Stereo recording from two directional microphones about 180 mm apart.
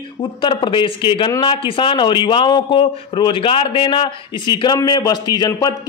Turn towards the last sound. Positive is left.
turn(degrees=20)  # may be behind; listen again after turning